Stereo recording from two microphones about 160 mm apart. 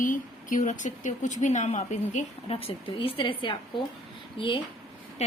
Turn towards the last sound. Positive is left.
turn(degrees=45)  # may be behind; listen again after turning